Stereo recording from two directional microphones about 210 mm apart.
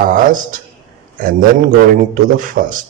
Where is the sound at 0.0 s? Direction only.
40° right (ahead or behind).